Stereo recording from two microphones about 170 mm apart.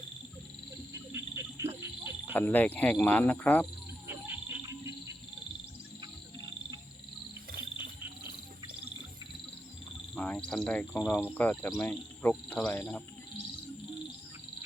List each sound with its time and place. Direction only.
1.1 s frog: 15° right (ahead or behind)
2.3 s speech: 10° left (ahead or behind)
4.0 s frog: 15° right (ahead or behind)
4.6 s bird: 20° right (ahead or behind)
10.2 s speech: 5° left (ahead or behind)